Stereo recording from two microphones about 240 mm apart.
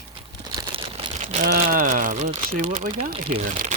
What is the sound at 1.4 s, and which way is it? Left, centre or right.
Speech, right.